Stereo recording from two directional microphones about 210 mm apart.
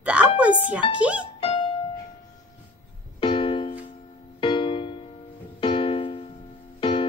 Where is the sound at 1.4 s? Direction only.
25° left (ahead or behind).